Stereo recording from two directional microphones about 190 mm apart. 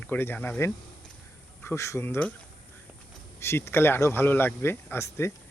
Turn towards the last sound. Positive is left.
turn(degrees=15)  # may be behind; listen again after turning